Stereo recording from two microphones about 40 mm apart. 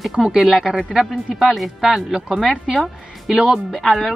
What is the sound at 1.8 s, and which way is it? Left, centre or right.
Speech, centre.